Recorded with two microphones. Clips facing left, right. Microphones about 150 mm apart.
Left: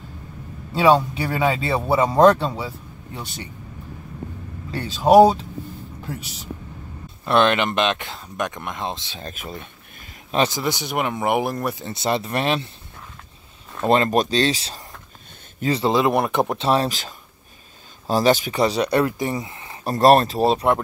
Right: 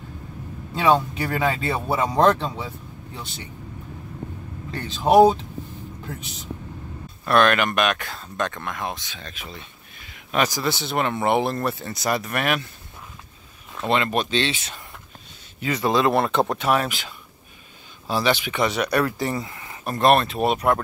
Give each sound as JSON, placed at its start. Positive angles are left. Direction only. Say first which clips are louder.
{"t": 0.8, "sound": "speech", "louder": "left 3 dB", "side_deg": 5}
{"t": 4.7, "sound": "speech", "louder": "left 3 dB", "side_deg": 5}
{"t": 7.2, "sound": "speech", "louder": "left 1 dB", "side_deg": 20}
{"t": 9.1, "sound": "speech", "louder": "left 5 dB", "side_deg": 45}
{"t": 10.3, "sound": "speech", "louder": "left 2 dB", "side_deg": 30}
{"t": 10.6, "sound": "speech", "louder": "even", "side_deg": 15}
{"t": 11.9, "sound": "speech", "louder": "left 2 dB", "side_deg": 30}
{"t": 13.8, "sound": "speech", "louder": "left 5 dB", "side_deg": 40}
{"t": 16.6, "sound": "speech", "louder": "left 2 dB", "side_deg": 30}